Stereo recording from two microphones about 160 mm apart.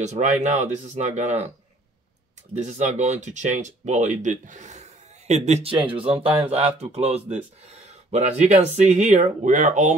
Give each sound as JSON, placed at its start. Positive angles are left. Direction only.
{"t": 0.0, "sound": "speech", "side_deg": -50}
{"t": 2.5, "sound": "speech", "side_deg": -45}